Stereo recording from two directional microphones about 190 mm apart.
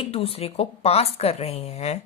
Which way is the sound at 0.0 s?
30° left (ahead or behind).